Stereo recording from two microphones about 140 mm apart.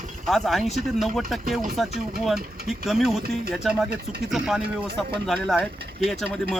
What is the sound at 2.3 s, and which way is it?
Speech, 90° right.